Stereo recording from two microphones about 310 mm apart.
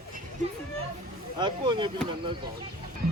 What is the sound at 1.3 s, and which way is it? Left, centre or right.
Speech, centre.